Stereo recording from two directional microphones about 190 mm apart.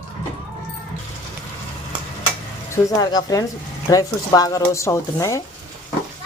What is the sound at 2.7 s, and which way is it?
Speech, 20° left (ahead or behind).